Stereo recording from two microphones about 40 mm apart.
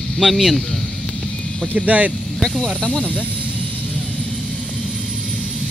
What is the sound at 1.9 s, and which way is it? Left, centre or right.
Speech, right.